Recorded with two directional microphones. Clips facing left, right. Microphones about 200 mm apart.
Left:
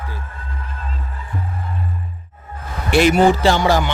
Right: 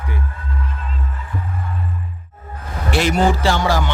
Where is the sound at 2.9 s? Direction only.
15° left (ahead or behind).